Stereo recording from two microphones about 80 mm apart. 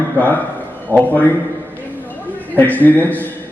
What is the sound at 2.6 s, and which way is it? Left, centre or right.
Speech, left.